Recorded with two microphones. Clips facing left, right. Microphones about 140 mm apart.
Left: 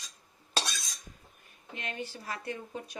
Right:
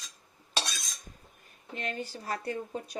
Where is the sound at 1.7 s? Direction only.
35° right (ahead or behind).